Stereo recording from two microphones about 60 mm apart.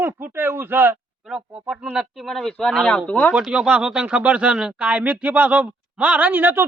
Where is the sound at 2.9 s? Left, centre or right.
Left.